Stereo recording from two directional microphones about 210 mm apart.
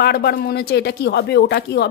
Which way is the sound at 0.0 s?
50° left (ahead or behind).